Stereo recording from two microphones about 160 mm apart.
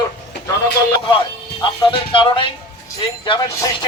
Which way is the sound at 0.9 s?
30° left (ahead or behind).